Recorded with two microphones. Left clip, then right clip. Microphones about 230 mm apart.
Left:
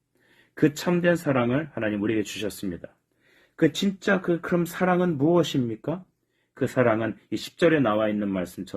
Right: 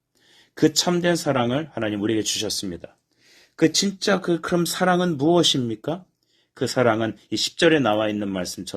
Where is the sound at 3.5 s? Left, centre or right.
Right.